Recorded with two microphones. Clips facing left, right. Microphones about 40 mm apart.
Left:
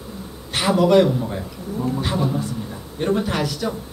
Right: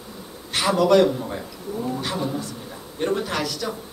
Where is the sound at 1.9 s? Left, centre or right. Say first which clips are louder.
Left 4 dB; centre.